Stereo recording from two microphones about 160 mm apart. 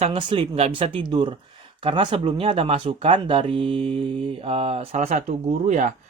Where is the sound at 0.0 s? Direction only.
30° right (ahead or behind).